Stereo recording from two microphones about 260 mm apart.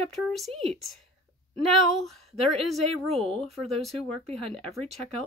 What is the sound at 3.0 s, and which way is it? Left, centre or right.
Speech, right.